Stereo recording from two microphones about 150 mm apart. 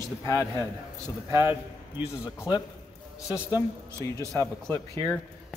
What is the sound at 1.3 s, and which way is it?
A man's voice, 25° left (ahead or behind).